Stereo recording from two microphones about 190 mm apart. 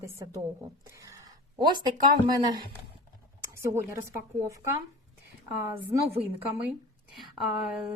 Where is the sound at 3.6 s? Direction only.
15° right (ahead or behind).